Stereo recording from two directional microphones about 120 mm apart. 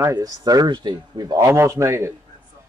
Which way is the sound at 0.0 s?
30° right (ahead or behind).